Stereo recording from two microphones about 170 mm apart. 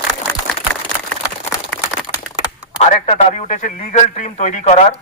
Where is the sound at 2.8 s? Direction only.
40° left (ahead or behind).